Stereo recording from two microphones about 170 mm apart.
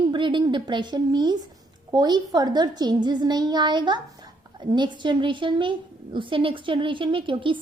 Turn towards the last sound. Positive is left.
turn(degrees=-30)  # may be behind; listen again after turning